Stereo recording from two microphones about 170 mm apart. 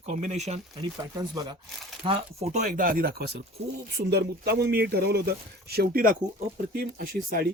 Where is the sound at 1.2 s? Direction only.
25° right (ahead or behind).